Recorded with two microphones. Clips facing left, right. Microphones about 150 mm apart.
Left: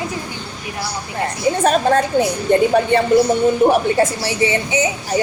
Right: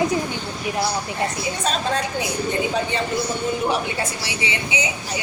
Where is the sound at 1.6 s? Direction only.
55° left (ahead or behind).